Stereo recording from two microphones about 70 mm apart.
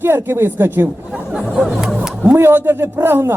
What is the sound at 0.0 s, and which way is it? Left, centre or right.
Speech, right.